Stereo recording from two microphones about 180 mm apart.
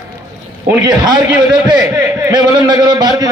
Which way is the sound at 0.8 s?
25° right (ahead or behind).